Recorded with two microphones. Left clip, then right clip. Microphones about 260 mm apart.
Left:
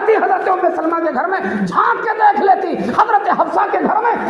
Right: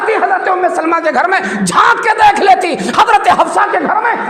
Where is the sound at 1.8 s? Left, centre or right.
Right.